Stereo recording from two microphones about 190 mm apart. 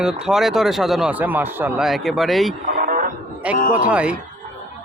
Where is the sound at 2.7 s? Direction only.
45° right (ahead or behind).